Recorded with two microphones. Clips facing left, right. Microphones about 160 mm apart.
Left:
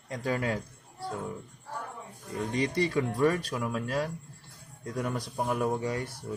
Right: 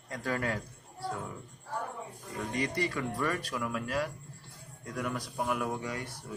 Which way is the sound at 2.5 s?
25° left (ahead or behind).